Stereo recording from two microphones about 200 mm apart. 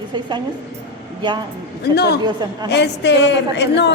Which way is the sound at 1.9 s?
55° left (ahead or behind).